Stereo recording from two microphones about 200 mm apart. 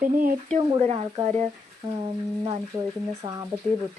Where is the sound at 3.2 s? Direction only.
15° right (ahead or behind).